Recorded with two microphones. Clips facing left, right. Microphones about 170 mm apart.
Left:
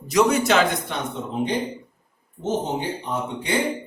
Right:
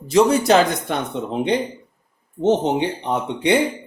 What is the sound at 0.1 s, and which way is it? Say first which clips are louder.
Speech: right 4 dB; 30° right (ahead or behind).